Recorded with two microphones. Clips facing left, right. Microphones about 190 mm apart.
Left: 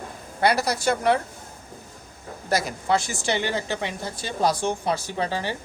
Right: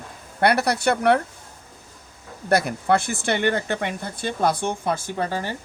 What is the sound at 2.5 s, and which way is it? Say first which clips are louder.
A woman's voice: right 3 dB; 55° right (ahead or behind).